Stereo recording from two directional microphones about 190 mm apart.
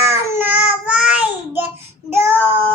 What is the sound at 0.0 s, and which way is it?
Child singing, 15° right (ahead or behind).